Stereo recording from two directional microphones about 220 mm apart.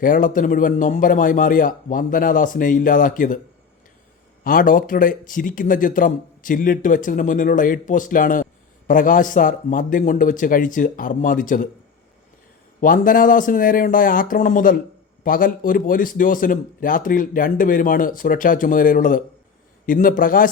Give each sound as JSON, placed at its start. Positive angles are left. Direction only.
{"t": 0.0, "sound": "speech", "side_deg": 40}
{"t": 4.4, "sound": "speech", "side_deg": 40}
{"t": 12.8, "sound": "speech", "side_deg": 40}